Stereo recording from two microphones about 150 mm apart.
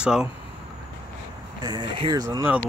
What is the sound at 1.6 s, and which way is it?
Speech, 30° right (ahead or behind).